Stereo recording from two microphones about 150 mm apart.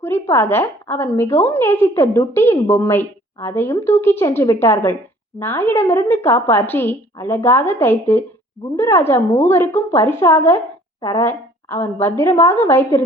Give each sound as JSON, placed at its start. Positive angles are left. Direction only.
{"t": 0.0, "sound": "a woman's voice", "side_deg": 15}